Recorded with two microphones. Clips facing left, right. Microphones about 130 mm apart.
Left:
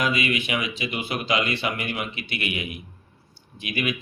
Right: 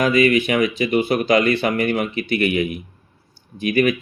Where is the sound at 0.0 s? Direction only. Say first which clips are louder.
Right 9 dB; 45° right (ahead or behind).